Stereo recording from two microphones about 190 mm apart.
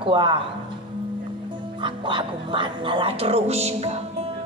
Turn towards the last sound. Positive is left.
turn(degrees=-35)  # may be behind; listen again after turning